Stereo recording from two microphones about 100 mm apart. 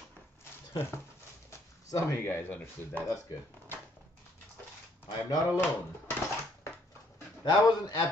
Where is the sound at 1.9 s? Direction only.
25° left (ahead or behind).